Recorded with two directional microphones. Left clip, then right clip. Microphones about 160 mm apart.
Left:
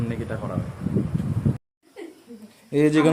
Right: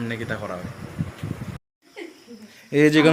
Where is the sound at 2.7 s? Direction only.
5° left (ahead or behind).